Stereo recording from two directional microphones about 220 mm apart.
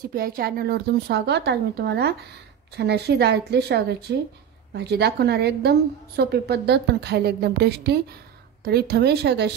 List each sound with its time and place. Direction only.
0.1 s a woman's voice: 40° right (ahead or behind)